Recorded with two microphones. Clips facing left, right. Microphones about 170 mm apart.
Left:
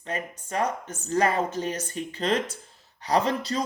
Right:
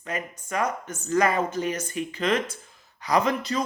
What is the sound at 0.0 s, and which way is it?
Speech, 30° left (ahead or behind).